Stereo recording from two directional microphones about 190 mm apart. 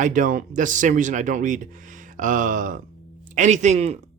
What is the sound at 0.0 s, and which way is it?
Speech, 45° right (ahead or behind).